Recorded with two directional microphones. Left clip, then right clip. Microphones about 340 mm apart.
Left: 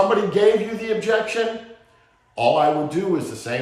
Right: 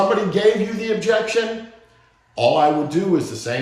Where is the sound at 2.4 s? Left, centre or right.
Centre.